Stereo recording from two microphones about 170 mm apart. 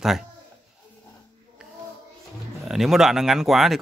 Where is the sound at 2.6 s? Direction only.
Centre (ahead or behind).